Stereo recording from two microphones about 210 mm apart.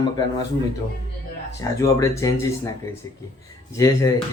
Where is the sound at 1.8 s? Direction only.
15° left (ahead or behind).